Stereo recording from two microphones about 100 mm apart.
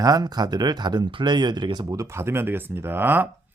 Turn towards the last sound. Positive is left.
turn(degrees=-20)  # may be behind; listen again after turning